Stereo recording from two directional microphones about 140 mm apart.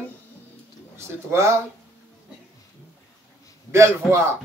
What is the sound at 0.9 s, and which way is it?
Speech, 20° right (ahead or behind).